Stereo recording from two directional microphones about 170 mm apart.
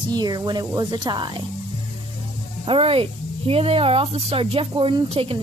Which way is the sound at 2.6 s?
30° right (ahead or behind).